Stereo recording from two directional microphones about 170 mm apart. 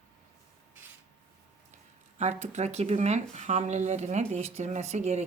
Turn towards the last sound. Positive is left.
turn(degrees=-40)  # may be behind; listen again after turning